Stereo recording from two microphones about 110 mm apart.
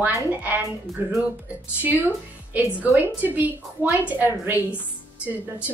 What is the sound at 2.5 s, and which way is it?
A woman's voice, 20° right (ahead or behind).